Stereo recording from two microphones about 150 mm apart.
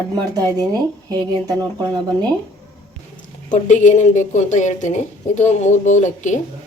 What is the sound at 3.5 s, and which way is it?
A woman's voice, 55° left (ahead or behind).